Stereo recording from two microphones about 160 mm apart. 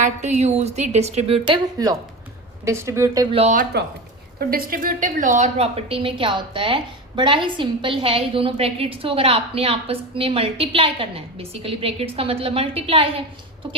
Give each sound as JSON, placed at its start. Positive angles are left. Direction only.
{"t": 0.0, "sound": "speech", "side_deg": -45}
{"t": 1.8, "sound": "a woman's voice", "side_deg": -25}
{"t": 3.5, "sound": "a woman's voice", "side_deg": -75}